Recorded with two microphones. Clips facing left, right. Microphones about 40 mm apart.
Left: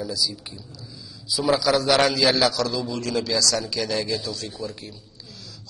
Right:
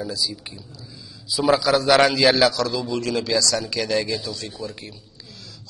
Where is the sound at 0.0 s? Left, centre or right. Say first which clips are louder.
Even; right.